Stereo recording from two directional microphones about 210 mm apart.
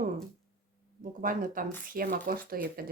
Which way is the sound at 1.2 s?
40° right (ahead or behind).